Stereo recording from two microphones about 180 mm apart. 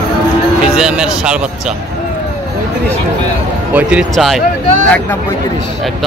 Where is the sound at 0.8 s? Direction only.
5° right (ahead or behind).